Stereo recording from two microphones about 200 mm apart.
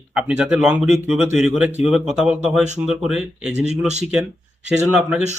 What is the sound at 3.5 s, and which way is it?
Speech, 35° right (ahead or behind).